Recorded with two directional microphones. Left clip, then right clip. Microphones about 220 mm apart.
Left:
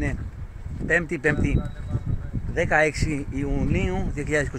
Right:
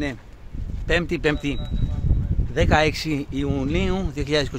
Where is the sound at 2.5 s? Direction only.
20° right (ahead or behind).